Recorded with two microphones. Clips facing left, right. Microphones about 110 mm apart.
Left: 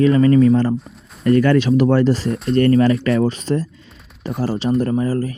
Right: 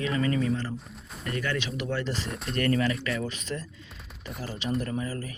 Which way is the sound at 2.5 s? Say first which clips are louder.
Left 12 dB; 35° left (ahead or behind).